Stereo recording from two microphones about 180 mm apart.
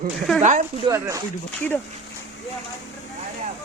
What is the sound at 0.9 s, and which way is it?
Speech, 15° right (ahead or behind).